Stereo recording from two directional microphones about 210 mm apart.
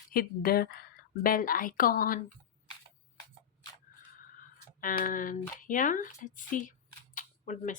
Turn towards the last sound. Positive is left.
turn(degrees=40)  # may be behind; listen again after turning